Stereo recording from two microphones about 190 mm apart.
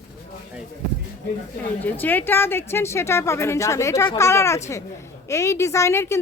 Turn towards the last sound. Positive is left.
turn(degrees=15)  # may be behind; listen again after turning